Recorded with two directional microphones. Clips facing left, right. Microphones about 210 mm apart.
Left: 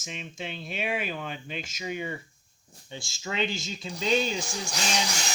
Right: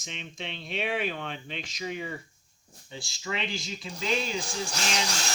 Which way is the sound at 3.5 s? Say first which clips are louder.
Left 1 dB; 25° left (ahead or behind).